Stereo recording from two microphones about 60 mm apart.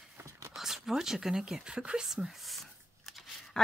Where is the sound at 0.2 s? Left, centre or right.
Right.